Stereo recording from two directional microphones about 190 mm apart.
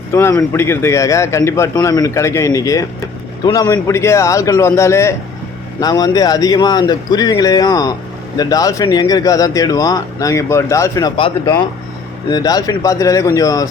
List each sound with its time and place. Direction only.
0.1 s speech: 15° left (ahead or behind)